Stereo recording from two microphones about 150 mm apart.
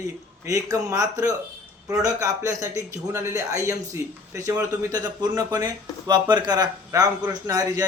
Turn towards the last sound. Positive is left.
turn(degrees=-25)  # may be behind; listen again after turning